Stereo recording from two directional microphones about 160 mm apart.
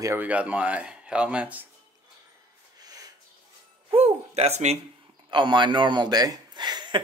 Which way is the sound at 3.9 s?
40° right (ahead or behind).